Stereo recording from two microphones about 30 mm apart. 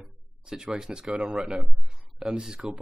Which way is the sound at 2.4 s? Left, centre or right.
Right.